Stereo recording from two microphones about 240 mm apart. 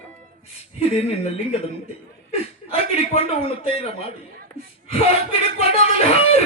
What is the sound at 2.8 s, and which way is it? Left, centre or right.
Speech, left.